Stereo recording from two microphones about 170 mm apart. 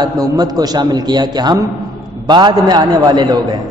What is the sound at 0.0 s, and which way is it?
A man's voice, 20° right (ahead or behind).